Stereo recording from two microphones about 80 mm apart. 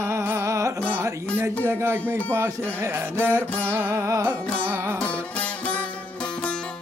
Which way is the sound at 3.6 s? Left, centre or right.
Right.